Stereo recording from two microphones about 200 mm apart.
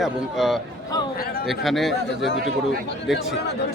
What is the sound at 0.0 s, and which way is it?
Speech, centre (ahead or behind).